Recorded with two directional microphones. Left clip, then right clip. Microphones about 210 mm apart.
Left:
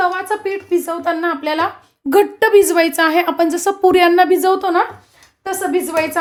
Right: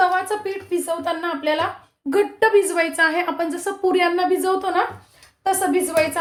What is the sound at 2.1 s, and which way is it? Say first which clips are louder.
A woman's voice: left 5 dB; 50° left (ahead or behind).